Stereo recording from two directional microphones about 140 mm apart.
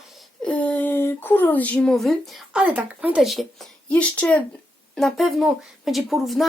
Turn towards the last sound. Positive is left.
turn(degrees=0)  # may be behind; listen again after turning